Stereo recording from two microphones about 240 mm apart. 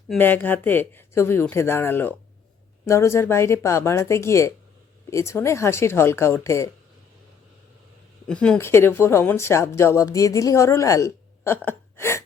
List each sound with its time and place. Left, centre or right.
0.1 s speech: centre
8.3 s speech: centre
11.9 s a sound: centre